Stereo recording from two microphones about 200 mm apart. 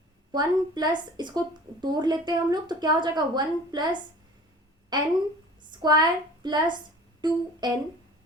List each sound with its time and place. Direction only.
0.3 s a woman's voice: 20° right (ahead or behind)